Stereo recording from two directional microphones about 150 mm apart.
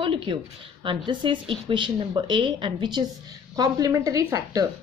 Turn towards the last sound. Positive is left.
turn(degrees=-20)  # may be behind; listen again after turning